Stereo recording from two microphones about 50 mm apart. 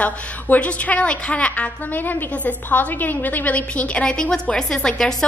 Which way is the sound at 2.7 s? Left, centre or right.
Left.